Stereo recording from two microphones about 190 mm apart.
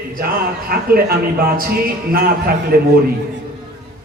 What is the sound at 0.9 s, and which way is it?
A man's voice, 50° right (ahead or behind).